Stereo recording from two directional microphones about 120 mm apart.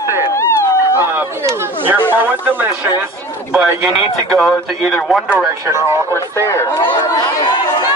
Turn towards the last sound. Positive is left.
turn(degrees=35)  # may be behind; listen again after turning